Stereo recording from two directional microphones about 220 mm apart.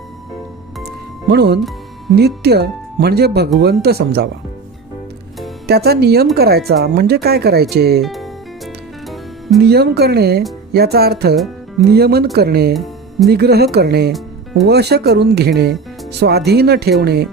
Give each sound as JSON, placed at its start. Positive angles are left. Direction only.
{"t": 0.9, "sound": "music", "side_deg": -50}
{"t": 2.1, "sound": "speech", "side_deg": -45}
{"t": 5.6, "sound": "speech", "side_deg": -45}
{"t": 8.0, "sound": "music", "side_deg": 0}
{"t": 9.6, "sound": "speech", "side_deg": -45}
{"t": 12.7, "sound": "music", "side_deg": 0}
{"t": 13.2, "sound": "speech", "side_deg": -45}